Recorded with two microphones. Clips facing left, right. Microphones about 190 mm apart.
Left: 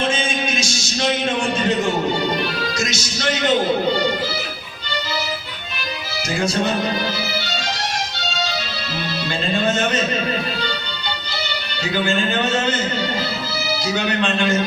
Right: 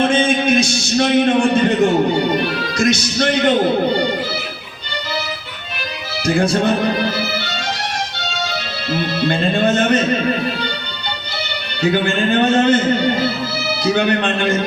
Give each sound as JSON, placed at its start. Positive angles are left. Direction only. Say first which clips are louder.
{"t": 0.0, "sound": "a sound", "louder": "right 7 dB", "side_deg": -55}
{"t": 2.4, "sound": "music", "louder": "right 5 dB", "side_deg": -55}
{"t": 6.2, "sound": "speech", "louder": "right 5 dB", "side_deg": -55}
{"t": 9.0, "sound": "music", "louder": "right 7 dB", "side_deg": -55}
{"t": 11.8, "sound": "speech", "louder": "right 4 dB", "side_deg": -55}